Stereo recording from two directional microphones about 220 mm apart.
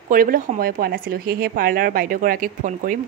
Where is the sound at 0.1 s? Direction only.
40° right (ahead or behind).